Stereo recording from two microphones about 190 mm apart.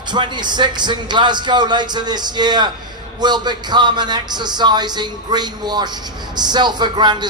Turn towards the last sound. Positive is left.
turn(degrees=-25)  # may be behind; listen again after turning